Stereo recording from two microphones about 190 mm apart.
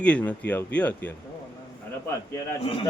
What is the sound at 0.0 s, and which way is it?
Speech, 5° left (ahead or behind).